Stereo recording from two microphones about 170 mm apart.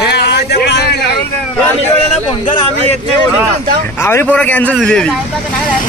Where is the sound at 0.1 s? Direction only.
80° left.